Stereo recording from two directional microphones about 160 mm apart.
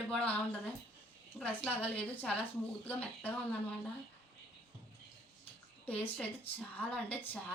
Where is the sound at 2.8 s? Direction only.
10° left (ahead or behind).